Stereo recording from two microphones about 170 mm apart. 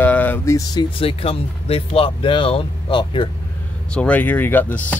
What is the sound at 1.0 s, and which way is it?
Speech, 35° left (ahead or behind).